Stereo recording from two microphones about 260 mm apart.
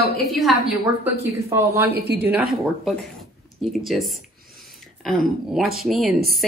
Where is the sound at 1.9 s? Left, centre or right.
Right.